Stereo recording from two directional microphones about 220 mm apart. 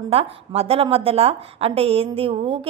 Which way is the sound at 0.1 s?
25° right (ahead or behind).